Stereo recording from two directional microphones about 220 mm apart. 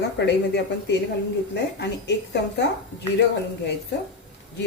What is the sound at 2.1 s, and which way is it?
Speech, 50° left (ahead or behind).